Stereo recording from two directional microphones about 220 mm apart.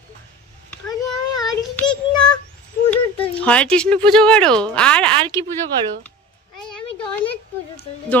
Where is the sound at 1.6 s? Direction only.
10° left (ahead or behind).